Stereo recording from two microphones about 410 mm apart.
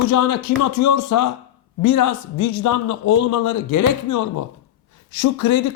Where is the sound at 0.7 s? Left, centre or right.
Left.